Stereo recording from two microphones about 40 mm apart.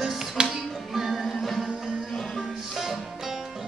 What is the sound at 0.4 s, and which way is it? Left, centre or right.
Music, right.